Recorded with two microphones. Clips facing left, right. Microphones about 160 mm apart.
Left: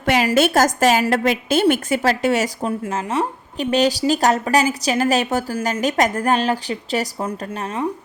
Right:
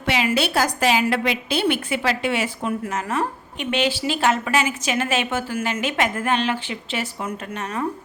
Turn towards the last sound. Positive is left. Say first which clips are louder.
# left 3 dB
turn(degrees=35)  # may be behind; listen again after turning